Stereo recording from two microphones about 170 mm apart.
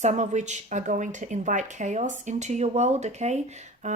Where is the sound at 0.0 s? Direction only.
45° right (ahead or behind).